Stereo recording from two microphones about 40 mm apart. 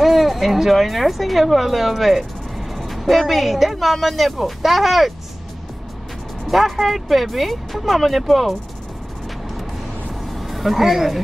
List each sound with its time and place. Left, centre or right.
0.0 s a woman's voice: centre
6.4 s a woman's voice: centre
10.5 s speech: centre